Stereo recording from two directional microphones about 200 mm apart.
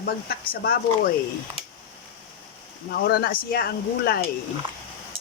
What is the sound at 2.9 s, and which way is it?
Speech, 50° left (ahead or behind).